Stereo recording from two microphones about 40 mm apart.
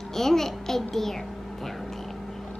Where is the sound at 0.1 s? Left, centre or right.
Centre.